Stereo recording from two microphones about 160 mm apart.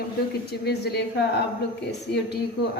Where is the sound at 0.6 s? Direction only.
90° left.